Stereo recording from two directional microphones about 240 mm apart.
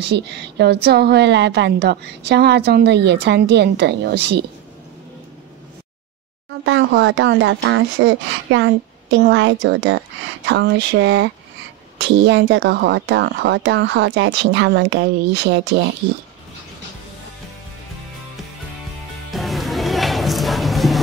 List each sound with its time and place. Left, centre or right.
0.0 s speech: right
6.5 s speech: right
19.3 s music: centre